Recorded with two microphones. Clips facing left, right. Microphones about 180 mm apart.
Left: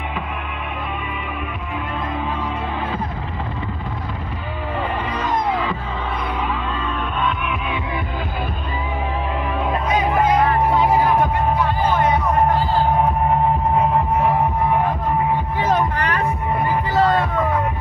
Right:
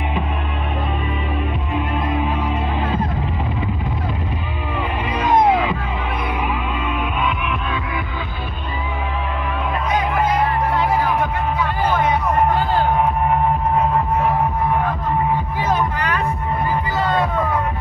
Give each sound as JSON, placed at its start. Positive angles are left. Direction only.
{"t": 5.2, "sound": "music", "side_deg": -20}